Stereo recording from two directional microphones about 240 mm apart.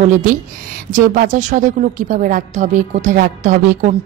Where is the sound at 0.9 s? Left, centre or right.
Right.